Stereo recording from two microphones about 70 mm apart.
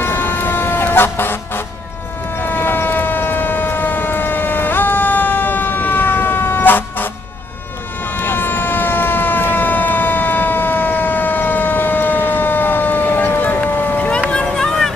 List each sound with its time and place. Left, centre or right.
0.0 s vehicle: left
2.4 s civil defense siren: left
8.2 s siren: left
14.3 s a sound: centre